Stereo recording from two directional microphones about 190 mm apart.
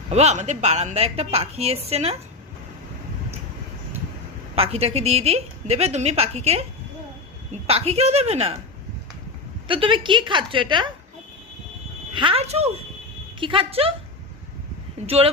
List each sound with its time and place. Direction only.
0.1 s a woman's voice: 35° right (ahead or behind)
4.5 s a woman's voice: 30° right (ahead or behind)
7.7 s a woman's voice: 30° right (ahead or behind)
9.6 s a woman's voice: 25° right (ahead or behind)
12.1 s a woman's voice: 30° right (ahead or behind)
15.0 s a woman's voice: 30° right (ahead or behind)